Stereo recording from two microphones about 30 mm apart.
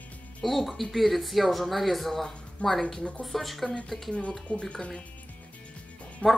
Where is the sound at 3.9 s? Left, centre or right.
Left.